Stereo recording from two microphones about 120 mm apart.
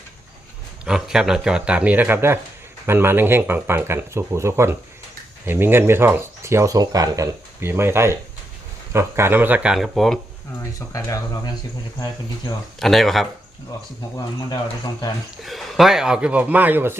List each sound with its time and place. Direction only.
0.9 s speech: 5° right (ahead or behind)
9.7 s speech: centre (ahead or behind)
10.6 s speech: 25° left (ahead or behind)
12.8 s speech: centre (ahead or behind)
15.4 s speech: centre (ahead or behind); by 17.0 s 15° right (ahead or behind)